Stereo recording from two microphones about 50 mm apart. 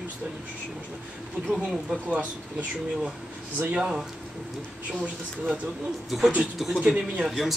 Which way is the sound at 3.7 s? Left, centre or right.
Centre.